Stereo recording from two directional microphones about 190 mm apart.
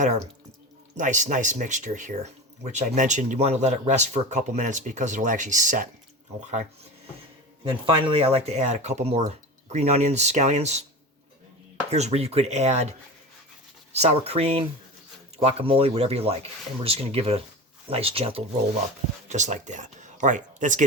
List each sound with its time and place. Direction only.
0.9 s speech: 40° right (ahead or behind)
7.6 s speech: 25° right (ahead or behind)
11.9 s speech: 35° right (ahead or behind)
13.9 s speech: 35° right (ahead or behind)